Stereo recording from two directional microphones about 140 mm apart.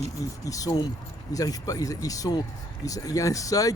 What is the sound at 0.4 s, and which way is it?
Speech, 25° left (ahead or behind).